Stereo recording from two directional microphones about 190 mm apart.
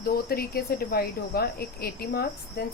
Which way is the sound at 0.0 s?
50° left (ahead or behind).